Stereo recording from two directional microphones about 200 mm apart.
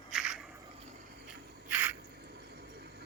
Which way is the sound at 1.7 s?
10° right (ahead or behind).